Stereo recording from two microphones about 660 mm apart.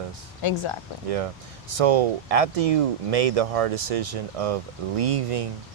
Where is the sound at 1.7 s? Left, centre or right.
Right.